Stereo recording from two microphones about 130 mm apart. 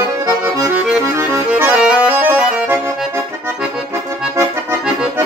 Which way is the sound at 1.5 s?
10° right (ahead or behind).